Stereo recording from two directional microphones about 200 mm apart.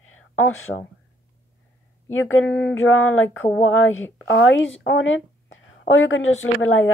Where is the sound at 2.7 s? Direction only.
90° left.